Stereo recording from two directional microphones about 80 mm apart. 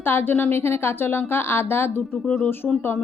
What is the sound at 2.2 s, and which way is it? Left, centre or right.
Speech, centre.